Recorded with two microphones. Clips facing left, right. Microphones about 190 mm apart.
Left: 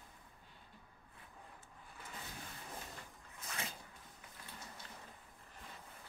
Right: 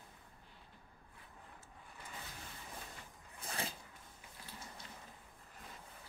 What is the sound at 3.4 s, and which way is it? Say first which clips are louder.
Zipper: right 4 dB; 30° right (ahead or behind).